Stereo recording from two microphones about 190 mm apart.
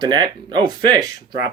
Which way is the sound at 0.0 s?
25° right (ahead or behind).